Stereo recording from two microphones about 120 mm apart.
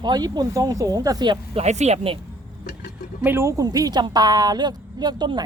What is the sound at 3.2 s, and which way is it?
A woman's voice, 20° right (ahead or behind).